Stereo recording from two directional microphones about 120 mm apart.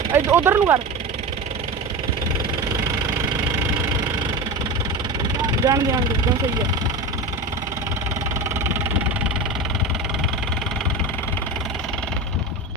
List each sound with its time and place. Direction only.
0.1 s speech: 20° right (ahead or behind)
5.4 s speech: 30° right (ahead or behind)